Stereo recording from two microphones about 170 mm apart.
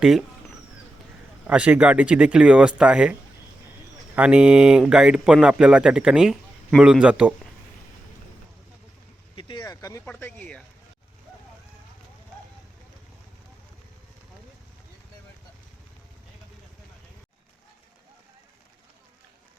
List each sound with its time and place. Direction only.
0.0 s speech: centre (ahead or behind)
1.5 s speech: 10° right (ahead or behind)
9.3 s vehicle: 30° left (ahead or behind)
10.1 s speech: 10° left (ahead or behind)